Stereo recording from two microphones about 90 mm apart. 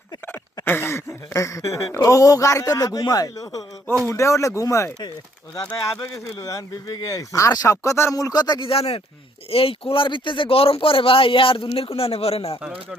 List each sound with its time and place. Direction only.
0.6 s speech: 25° left (ahead or behind); by 8.7 s 50° left (ahead or behind)
8.7 s speech: 90° left
12.6 s speech: 10° right (ahead or behind)